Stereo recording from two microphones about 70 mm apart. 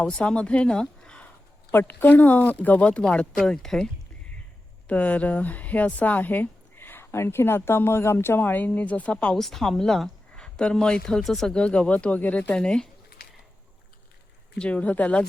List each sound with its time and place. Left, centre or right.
0.0 s speech: centre
1.7 s speech: left; by 3.8 s centre
4.9 s speech: left
9.4 s speech: centre; by 12.5 s left
12.5 s speech: centre
14.6 s speech: centre